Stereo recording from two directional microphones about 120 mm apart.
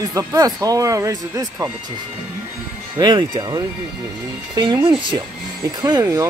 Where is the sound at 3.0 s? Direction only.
40° right (ahead or behind).